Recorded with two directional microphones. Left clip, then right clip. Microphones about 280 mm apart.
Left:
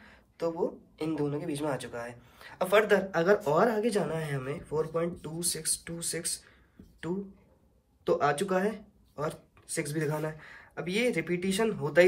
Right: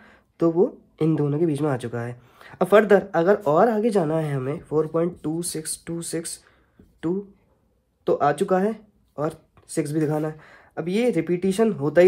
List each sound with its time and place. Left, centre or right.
0.0 s speech: right
3.1 s speech: centre
8.0 s speech: centre